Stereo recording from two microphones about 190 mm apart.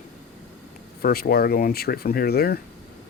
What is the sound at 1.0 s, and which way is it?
Speech, 55° left (ahead or behind).